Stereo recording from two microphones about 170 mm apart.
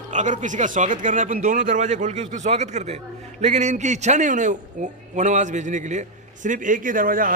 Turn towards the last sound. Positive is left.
turn(degrees=-55)  # may be behind; listen again after turning